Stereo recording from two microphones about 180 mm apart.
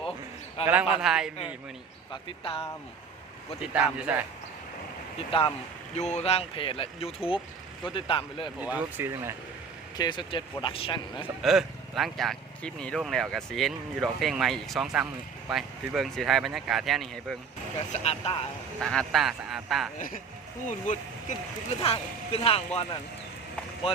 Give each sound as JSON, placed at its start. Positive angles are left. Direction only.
{"t": 0.7, "sound": "speech", "side_deg": -5}
{"t": 2.2, "sound": "speech", "side_deg": 30}
{"t": 3.6, "sound": "speech", "side_deg": -5}
{"t": 5.3, "sound": "speech", "side_deg": 30}
{"t": 8.6, "sound": "speech", "side_deg": -10}
{"t": 10.0, "sound": "speech", "side_deg": 25}
{"t": 11.4, "sound": "speech", "side_deg": 0}
{"t": 17.9, "sound": "speech", "side_deg": 35}
{"t": 18.8, "sound": "speech", "side_deg": 5}
{"t": 20.0, "sound": "speech", "side_deg": 50}